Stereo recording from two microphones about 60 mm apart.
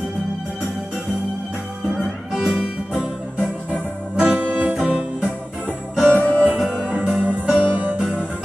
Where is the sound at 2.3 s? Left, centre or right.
Centre.